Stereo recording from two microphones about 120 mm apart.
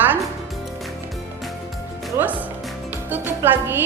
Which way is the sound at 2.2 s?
15° right (ahead or behind).